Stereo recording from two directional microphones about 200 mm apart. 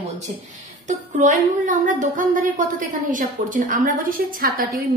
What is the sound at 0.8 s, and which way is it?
A woman's voice, 40° right (ahead or behind).